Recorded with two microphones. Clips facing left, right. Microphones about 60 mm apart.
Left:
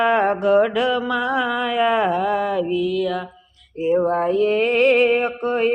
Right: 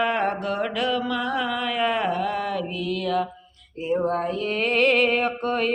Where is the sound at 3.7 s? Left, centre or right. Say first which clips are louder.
Left 5 dB; centre.